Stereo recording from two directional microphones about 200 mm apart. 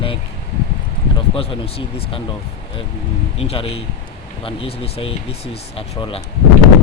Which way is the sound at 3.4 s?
30° left (ahead or behind).